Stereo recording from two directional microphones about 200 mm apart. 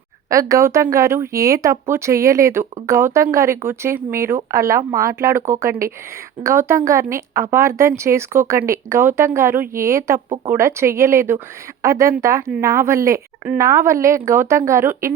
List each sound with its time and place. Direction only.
0.3 s speech: 15° right (ahead or behind)
10.2 s speech: 25° right (ahead or behind)
10.5 s speech: 15° right (ahead or behind)